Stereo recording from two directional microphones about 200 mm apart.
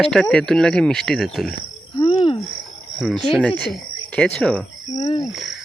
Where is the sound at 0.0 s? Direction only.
5° left (ahead or behind).